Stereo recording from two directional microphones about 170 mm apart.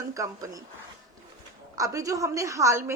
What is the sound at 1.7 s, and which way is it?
A woman's voice, 20° right (ahead or behind).